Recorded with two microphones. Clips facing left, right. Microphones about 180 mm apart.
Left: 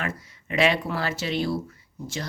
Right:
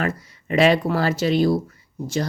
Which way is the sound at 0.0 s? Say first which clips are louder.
Right 7 dB; 40° right (ahead or behind).